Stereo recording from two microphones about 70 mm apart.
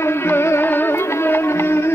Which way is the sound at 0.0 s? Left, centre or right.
Left.